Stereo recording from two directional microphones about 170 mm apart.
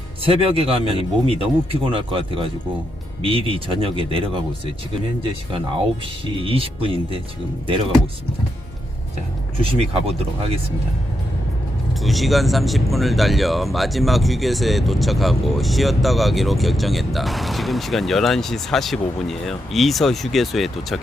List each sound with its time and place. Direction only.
0.2 s speech: 35° right (ahead or behind)
6.4 s speech: 35° right (ahead or behind)
9.6 s speech: 35° right (ahead or behind)
12.0 s speech: centre (ahead or behind)